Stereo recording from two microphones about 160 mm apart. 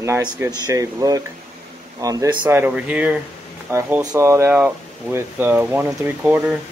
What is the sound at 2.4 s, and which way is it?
Speech, 10° right (ahead or behind).